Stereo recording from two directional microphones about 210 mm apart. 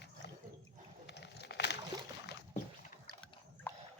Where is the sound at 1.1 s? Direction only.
50° left (ahead or behind).